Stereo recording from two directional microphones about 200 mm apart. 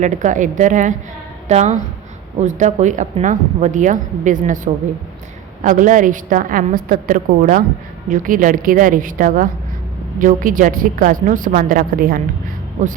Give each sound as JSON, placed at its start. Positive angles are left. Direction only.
{"t": 0.0, "sound": "a woman's voice", "side_deg": -40}